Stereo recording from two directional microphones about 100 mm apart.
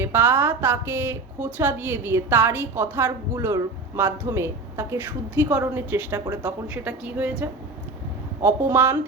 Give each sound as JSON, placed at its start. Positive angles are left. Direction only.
{"t": 0.0, "sound": "a woman's voice", "side_deg": -20}
{"t": 8.4, "sound": "a woman's voice", "side_deg": -25}